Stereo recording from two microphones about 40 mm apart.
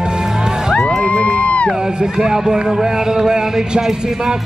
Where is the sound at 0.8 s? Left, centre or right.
Centre.